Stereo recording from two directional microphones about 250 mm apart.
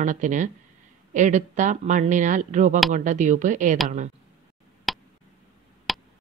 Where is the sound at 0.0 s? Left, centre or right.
Right.